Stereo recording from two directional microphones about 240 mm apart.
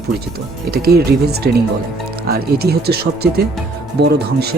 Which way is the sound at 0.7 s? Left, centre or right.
Right.